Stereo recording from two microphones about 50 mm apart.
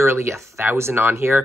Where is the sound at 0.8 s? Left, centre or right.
Right.